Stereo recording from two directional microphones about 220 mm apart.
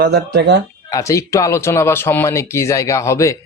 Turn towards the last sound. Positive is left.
turn(degrees=15)  # may be behind; listen again after turning